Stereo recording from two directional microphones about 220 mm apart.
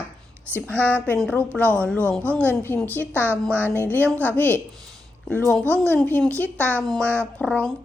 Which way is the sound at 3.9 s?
10° left (ahead or behind).